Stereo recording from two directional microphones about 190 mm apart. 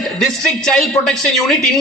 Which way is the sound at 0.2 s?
5° left (ahead or behind).